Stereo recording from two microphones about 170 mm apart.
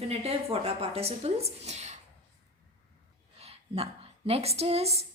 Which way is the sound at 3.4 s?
35° right (ahead or behind).